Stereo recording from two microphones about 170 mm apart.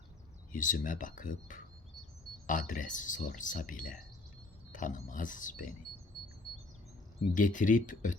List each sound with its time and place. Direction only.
0.5 s speech: 50° left (ahead or behind)
7.2 s speech: 50° left (ahead or behind)